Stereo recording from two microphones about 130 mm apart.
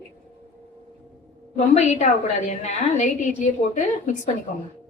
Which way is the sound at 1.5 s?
60° left (ahead or behind).